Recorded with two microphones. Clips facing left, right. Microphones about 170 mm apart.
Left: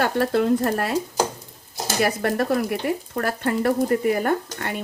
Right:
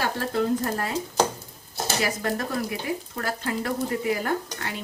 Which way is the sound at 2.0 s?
65° left (ahead or behind).